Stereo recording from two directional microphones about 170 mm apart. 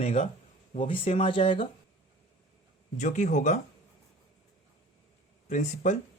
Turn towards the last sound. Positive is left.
turn(degrees=45)  # may be behind; listen again after turning